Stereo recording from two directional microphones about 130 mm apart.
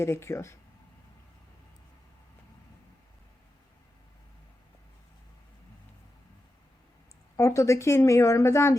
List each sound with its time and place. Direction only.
0.0 s speech: 20° left (ahead or behind)
7.3 s speech: 20° left (ahead or behind)